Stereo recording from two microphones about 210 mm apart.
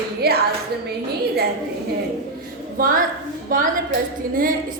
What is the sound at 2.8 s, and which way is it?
Speech, 40° right (ahead or behind).